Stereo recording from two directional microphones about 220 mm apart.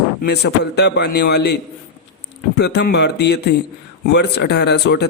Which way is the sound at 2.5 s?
50° left (ahead or behind).